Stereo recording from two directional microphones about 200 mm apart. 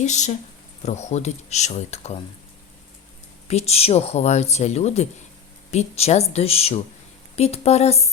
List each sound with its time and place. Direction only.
0.0 s speech: 35° left (ahead or behind)
3.5 s speech: 30° left (ahead or behind)